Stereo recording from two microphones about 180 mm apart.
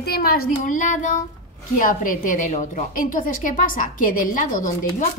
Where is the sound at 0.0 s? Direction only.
55° left (ahead or behind).